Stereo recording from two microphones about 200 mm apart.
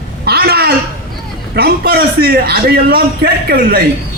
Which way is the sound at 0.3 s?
50° right (ahead or behind).